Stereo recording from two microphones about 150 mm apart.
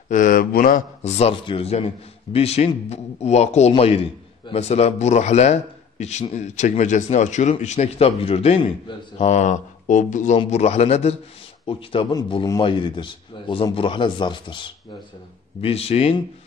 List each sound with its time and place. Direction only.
0.1 s speech: 60° left (ahead or behind)
1.0 s a man's voice: 45° left (ahead or behind)